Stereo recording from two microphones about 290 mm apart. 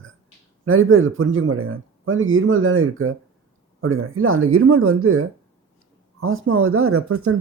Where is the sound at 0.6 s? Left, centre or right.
Right.